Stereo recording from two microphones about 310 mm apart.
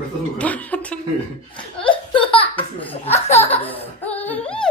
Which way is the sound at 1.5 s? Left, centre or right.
Centre.